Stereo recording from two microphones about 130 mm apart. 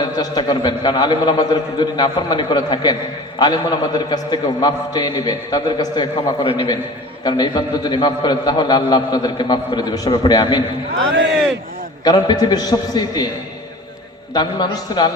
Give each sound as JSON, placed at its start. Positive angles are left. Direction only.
{"t": 0.0, "sound": "a man's voice", "side_deg": 35}
{"t": 12.0, "sound": "a man's voice", "side_deg": 30}
{"t": 14.3, "sound": "a man's voice", "side_deg": 35}